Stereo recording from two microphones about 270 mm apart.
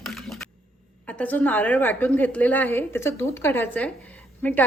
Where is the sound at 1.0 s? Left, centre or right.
Centre.